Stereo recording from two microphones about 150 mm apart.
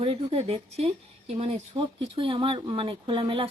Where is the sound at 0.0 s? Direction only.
40° right (ahead or behind).